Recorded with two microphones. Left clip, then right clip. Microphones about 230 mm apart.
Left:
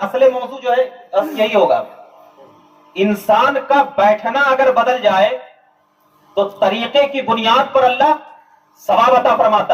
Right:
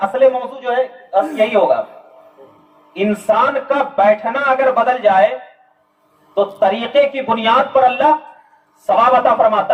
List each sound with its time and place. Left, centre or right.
0.0 s speech: left
2.9 s speech: left
6.3 s speech: left